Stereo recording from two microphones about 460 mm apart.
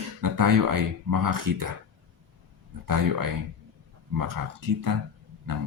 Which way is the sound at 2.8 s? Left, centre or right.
Right.